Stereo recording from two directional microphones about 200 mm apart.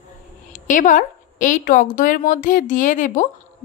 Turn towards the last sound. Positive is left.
turn(degrees=40)  # may be behind; listen again after turning